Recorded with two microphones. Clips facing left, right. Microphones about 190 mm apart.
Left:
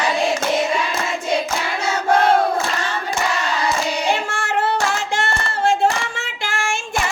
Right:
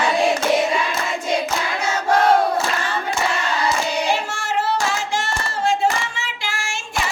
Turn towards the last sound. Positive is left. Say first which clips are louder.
# left 4 dB
turn(degrees=50)  # may be behind; listen again after turning